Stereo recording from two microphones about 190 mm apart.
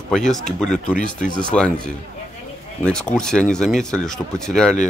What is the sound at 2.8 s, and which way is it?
Speech, 5° left (ahead or behind).